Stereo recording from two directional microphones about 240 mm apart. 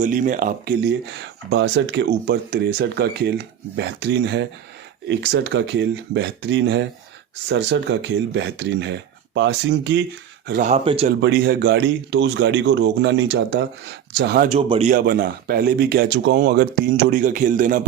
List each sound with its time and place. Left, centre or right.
0.0 s speech: right
0.9 s speech: right
10.4 s speech: right
10.8 s speech: right
11.2 s speech: right
14.5 s speech: right